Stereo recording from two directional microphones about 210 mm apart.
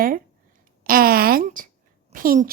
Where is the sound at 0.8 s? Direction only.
45° right (ahead or behind).